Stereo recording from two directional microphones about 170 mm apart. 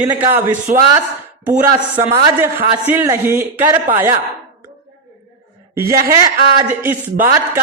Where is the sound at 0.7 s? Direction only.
50° right (ahead or behind).